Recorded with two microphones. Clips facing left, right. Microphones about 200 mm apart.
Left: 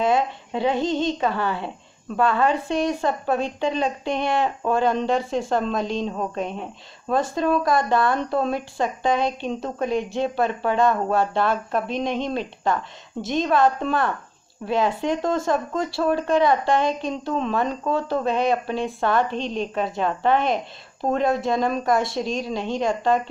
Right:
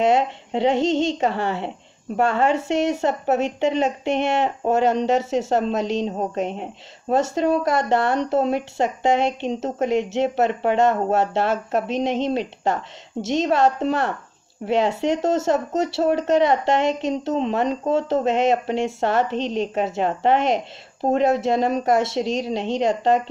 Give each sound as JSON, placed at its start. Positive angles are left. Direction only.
{"t": 0.0, "sound": "a woman's voice", "side_deg": -25}
{"t": 19.3, "sound": "a woman's voice", "side_deg": -75}
{"t": 19.6, "sound": "a woman's voice", "side_deg": -25}